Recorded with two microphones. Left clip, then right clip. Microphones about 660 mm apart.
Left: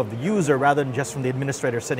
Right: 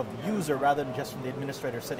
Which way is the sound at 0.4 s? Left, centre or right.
Left.